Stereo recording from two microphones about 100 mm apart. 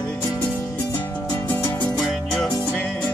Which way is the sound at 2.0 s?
5° left (ahead or behind).